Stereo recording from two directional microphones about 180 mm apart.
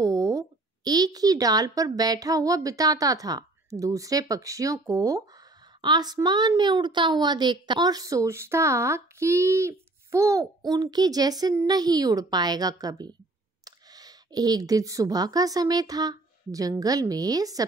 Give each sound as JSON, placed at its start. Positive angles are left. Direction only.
{"t": 0.0, "sound": "a woman's voice", "side_deg": -20}